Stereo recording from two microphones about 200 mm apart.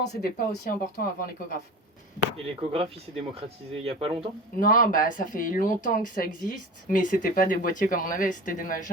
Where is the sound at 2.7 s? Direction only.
30° right (ahead or behind).